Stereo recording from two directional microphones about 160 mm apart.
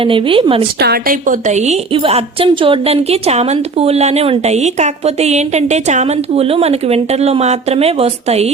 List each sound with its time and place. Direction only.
0.0 s a woman's voice: 35° right (ahead or behind)
0.8 s a woman's voice: 80° right; by 8.4 s 40° right (ahead or behind)